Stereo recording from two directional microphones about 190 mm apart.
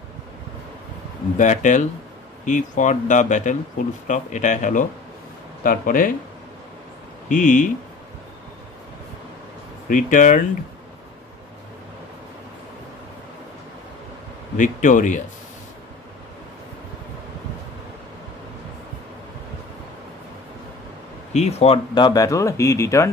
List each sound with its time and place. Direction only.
1.4 s speech: 40° left (ahead or behind)
7.2 s speech: 45° left (ahead or behind)
9.8 s speech: 45° left (ahead or behind)
14.6 s speech: 45° left (ahead or behind)
21.3 s speech: 35° left (ahead or behind); by 23.0 s 15° left (ahead or behind)